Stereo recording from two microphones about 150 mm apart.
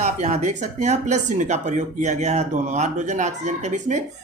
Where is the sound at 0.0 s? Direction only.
50° right (ahead or behind).